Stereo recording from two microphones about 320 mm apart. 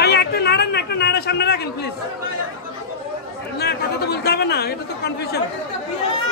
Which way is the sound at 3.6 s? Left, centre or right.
Left.